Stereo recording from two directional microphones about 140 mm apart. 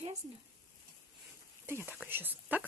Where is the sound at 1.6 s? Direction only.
15° right (ahead or behind).